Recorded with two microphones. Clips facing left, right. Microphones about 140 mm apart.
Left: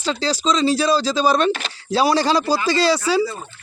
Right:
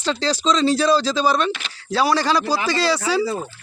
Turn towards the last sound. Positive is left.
turn(degrees=15)  # may be behind; listen again after turning